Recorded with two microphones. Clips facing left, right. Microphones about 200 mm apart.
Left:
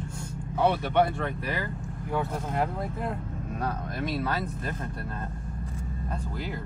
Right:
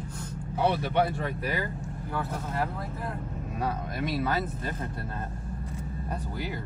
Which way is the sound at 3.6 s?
Centre (ahead or behind).